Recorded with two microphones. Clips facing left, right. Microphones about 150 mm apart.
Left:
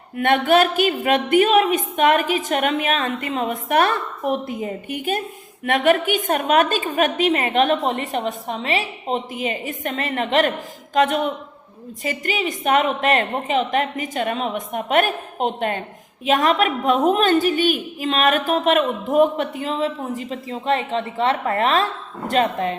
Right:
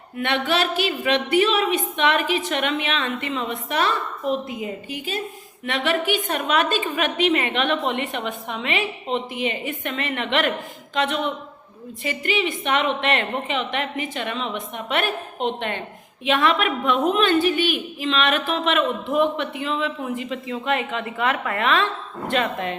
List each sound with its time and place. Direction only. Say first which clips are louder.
0.2 s a woman's voice: left 6 dB; 50° left (ahead or behind)